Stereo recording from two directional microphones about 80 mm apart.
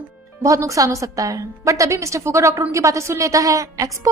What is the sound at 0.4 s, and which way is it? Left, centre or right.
A woman's voice, right.